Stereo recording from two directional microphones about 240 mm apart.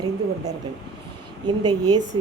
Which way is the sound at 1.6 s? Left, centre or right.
Centre.